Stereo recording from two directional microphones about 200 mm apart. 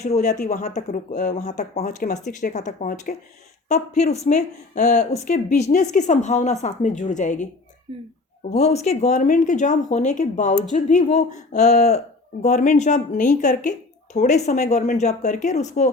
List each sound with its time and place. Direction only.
0.0 s speech: 35° left (ahead or behind)
7.9 s speech: 25° right (ahead or behind)
8.5 s speech: 35° left (ahead or behind)